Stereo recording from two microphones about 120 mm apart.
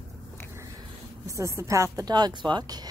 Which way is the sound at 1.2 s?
25° right (ahead or behind).